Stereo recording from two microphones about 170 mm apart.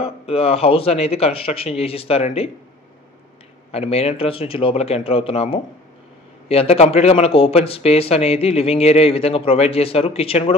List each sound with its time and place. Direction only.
0.0 s speech: 35° left (ahead or behind)
3.7 s speech: 35° left (ahead or behind)